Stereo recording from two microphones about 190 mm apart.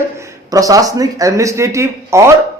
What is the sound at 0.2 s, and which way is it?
Speech, 15° right (ahead or behind).